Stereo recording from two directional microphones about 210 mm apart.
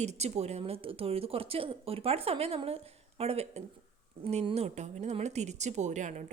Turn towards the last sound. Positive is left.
turn(degrees=-35)  # may be behind; listen again after turning